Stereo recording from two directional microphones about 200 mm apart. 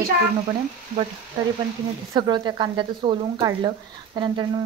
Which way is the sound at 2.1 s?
20° right (ahead or behind).